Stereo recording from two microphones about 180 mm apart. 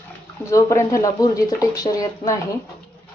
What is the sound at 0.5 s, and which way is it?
Speech, 15° left (ahead or behind).